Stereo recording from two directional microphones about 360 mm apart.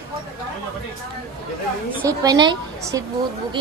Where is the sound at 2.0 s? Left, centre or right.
Centre.